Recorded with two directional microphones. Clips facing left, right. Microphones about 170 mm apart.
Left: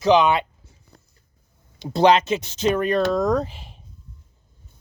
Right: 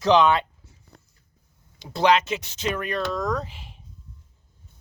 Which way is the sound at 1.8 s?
25° left (ahead or behind).